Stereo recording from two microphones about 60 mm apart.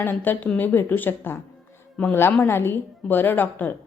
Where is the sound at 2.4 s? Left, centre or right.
Left.